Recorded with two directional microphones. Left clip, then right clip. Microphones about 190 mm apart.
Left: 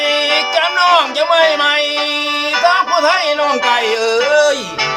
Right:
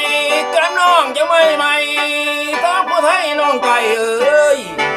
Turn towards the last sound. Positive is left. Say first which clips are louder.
# even
turn(degrees=-5)  # may be behind; listen again after turning